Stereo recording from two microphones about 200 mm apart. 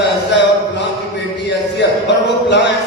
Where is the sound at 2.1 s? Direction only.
60° left (ahead or behind).